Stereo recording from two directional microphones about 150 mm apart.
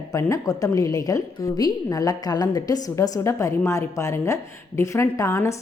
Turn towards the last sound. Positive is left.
turn(degrees=20)  # may be behind; listen again after turning